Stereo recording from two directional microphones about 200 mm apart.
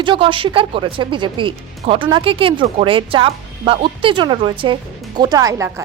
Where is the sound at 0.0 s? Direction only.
25° right (ahead or behind).